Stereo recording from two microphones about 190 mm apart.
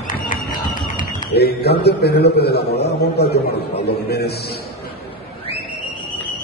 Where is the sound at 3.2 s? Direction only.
60° left (ahead or behind).